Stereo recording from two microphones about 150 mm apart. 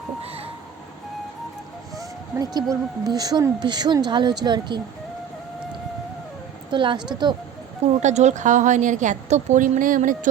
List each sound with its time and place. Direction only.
2.0 s speech: 25° right (ahead or behind)
6.7 s a woman's voice: 30° right (ahead or behind)
8.0 s a woman's voice: 50° right (ahead or behind)